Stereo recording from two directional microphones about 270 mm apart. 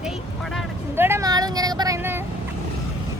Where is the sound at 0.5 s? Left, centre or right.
Centre.